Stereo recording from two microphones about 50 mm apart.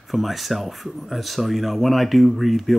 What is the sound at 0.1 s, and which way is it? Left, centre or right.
Speech, centre.